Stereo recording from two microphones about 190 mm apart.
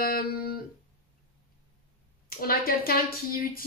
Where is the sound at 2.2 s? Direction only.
50° left (ahead or behind).